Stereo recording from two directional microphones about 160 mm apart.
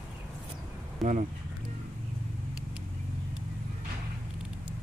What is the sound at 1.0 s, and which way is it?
Speech, 50° right (ahead or behind).